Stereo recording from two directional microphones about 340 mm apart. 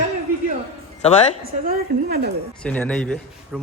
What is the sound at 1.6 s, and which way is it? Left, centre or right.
Speech, right.